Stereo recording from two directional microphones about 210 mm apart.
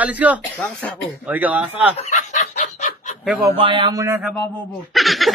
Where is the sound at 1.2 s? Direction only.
5° right (ahead or behind).